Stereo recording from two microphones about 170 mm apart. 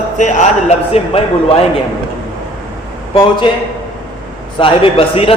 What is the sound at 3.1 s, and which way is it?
Speech, 30° left (ahead or behind).